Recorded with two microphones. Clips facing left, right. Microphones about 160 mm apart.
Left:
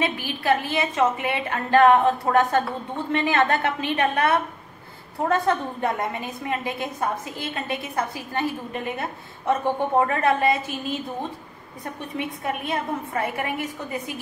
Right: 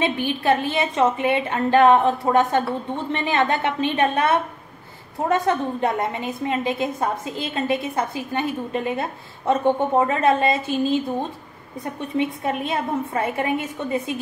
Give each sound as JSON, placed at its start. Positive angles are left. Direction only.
{"t": 0.0, "sound": "a woman's voice", "side_deg": -25}
{"t": 5.3, "sound": "a woman's voice", "side_deg": -20}
{"t": 12.2, "sound": "a woman's voice", "side_deg": -25}